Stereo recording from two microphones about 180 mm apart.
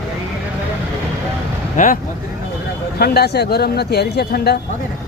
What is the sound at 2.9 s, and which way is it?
Speech, 60° left (ahead or behind).